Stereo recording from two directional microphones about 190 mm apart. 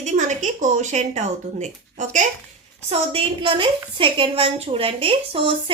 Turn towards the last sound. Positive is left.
turn(degrees=-30)  # may be behind; listen again after turning